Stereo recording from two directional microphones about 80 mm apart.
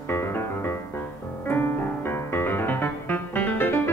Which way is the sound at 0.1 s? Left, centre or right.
Left.